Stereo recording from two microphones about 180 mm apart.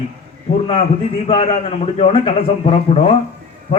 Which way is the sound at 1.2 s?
30° left (ahead or behind).